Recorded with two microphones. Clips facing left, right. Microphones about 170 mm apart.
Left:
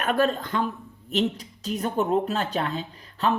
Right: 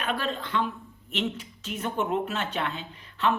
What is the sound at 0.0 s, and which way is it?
Speech, 45° left (ahead or behind).